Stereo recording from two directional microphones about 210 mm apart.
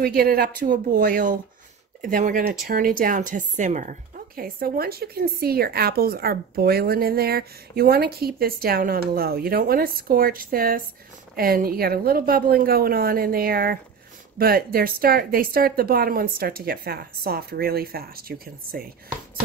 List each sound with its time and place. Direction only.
0.0 s speech: 45° right (ahead or behind)